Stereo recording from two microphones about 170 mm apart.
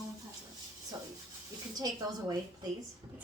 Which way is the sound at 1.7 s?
20° right (ahead or behind).